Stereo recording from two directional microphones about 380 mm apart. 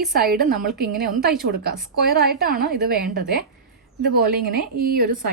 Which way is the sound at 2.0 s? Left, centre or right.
Right.